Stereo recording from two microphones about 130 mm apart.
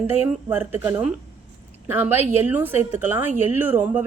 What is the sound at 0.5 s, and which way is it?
A woman's voice, 15° right (ahead or behind).